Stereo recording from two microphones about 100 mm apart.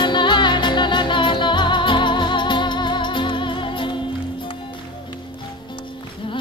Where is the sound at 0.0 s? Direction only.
50° left (ahead or behind).